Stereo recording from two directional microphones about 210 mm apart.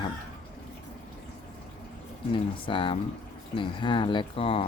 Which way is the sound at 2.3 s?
25° left (ahead or behind).